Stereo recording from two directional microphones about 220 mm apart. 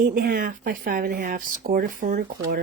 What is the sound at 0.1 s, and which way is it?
Speech, 45° right (ahead or behind).